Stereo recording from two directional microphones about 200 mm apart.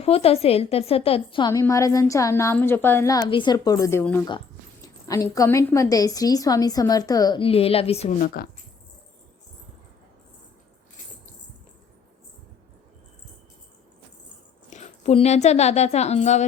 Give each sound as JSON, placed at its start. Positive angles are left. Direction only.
{"t": 0.0, "sound": "a woman's voice", "side_deg": 30}
{"t": 8.2, "sound": "speech", "side_deg": 50}
{"t": 14.7, "sound": "a woman's voice", "side_deg": 35}